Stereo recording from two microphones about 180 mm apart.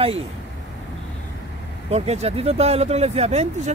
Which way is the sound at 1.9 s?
35° right (ahead or behind).